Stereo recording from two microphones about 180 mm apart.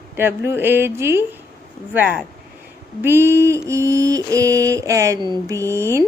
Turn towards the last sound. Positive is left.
turn(degrees=-15)  # may be behind; listen again after turning